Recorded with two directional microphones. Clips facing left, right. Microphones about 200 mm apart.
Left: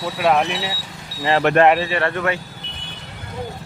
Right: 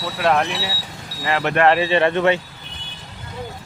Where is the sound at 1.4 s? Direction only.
55° left (ahead or behind).